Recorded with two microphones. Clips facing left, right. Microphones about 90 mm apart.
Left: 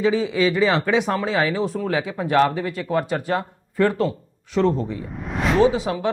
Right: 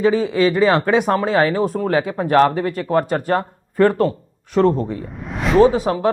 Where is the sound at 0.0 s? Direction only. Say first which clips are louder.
Right 3 dB; 45° right (ahead or behind).